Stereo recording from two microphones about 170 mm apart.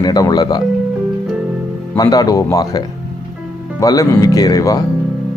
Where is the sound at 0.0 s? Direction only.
25° left (ahead or behind).